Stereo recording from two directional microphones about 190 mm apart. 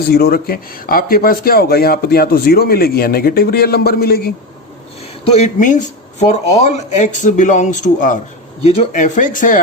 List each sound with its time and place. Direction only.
0.1 s speech: 55° left (ahead or behind)
5.2 s speech: 35° left (ahead or behind)